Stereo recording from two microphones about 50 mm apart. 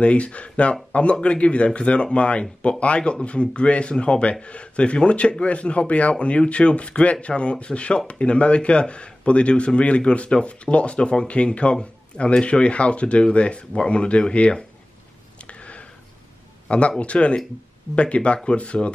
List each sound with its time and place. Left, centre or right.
0.0 s speech: left
15.4 s a sound: left
16.6 s a man's voice: left